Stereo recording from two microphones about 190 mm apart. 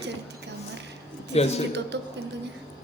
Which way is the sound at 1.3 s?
35° left (ahead or behind).